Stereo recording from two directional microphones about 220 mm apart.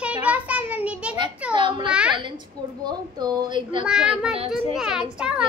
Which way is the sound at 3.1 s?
20° right (ahead or behind).